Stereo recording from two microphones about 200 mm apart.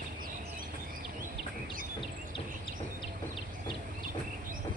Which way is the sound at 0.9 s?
45° right (ahead or behind).